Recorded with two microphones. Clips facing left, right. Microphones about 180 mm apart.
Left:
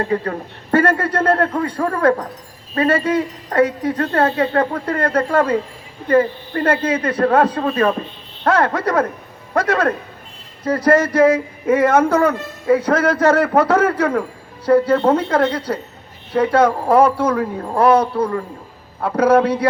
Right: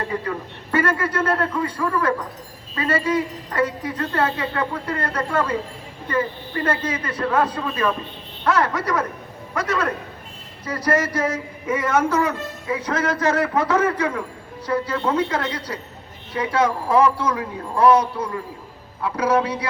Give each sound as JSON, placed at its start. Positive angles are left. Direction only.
{"t": 0.1, "sound": "a man's voice", "side_deg": 55}